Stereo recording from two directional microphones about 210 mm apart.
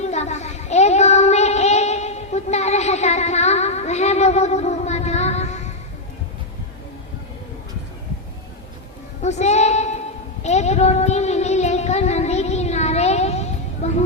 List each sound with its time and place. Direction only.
0.0 s child singing: 30° left (ahead or behind)
9.2 s a sound: 35° left (ahead or behind)
10.4 s music: 35° left (ahead or behind)